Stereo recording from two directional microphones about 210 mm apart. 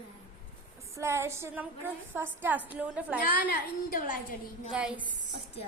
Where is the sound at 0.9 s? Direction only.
15° right (ahead or behind).